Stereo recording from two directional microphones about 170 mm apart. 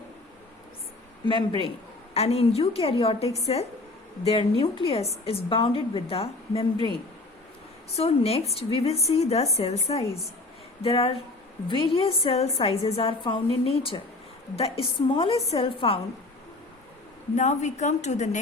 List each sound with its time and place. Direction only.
1.2 s a woman's voice: 30° left (ahead or behind)
7.9 s a woman's voice: 35° left (ahead or behind)
17.3 s a woman's voice: 45° left (ahead or behind)